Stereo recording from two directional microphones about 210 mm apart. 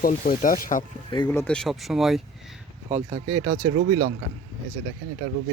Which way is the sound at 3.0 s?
30° right (ahead or behind).